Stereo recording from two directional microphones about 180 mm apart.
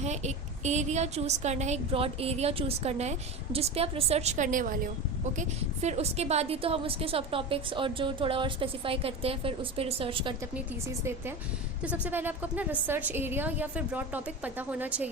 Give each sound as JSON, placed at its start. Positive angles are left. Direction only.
{"t": 0.0, "sound": "a woman's voice", "side_deg": -40}
{"t": 10.5, "sound": "a woman's voice", "side_deg": -15}